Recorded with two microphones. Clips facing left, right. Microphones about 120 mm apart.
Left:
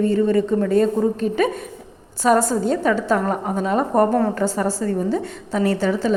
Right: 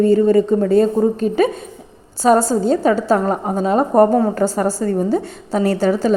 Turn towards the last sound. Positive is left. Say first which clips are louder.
# right 4 dB
turn(degrees=-40)  # may be behind; listen again after turning